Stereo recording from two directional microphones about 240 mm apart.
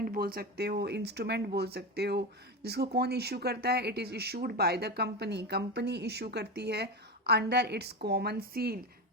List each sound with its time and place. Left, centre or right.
0.0 s speech: right